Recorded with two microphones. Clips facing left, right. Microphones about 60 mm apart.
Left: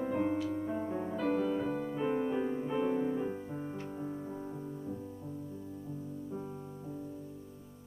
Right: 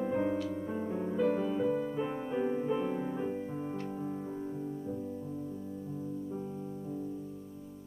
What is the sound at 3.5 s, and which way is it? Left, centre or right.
Piano, centre.